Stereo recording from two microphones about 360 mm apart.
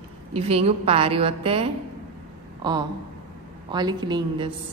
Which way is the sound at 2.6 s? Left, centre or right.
Centre.